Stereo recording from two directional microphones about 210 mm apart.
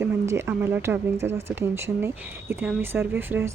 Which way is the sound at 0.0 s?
10° right (ahead or behind).